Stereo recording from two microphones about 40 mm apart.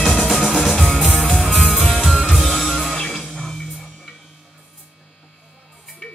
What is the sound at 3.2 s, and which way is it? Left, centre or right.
Music, left.